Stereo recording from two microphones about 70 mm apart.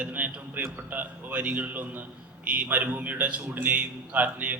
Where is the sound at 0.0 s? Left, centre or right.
Right.